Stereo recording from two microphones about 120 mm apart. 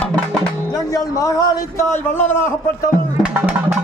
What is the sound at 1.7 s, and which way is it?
Speech, 20° left (ahead or behind).